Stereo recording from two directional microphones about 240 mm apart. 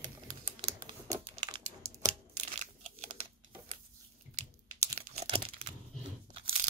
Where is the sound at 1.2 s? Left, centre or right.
Right.